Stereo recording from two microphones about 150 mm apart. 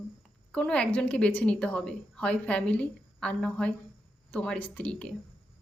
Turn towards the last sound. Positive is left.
turn(degrees=10)  # may be behind; listen again after turning